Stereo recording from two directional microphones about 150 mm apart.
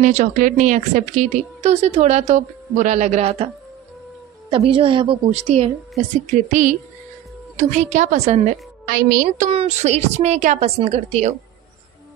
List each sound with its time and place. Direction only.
0.0 s speech: 55° right (ahead or behind)
4.5 s a woman's voice: 40° right (ahead or behind)
6.3 s speech: 55° right (ahead or behind)
8.8 s speech: 80° right
9.5 s speech: 45° right (ahead or behind)